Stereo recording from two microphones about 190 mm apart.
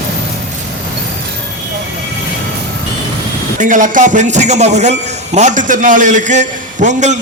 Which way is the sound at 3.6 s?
45° right (ahead or behind).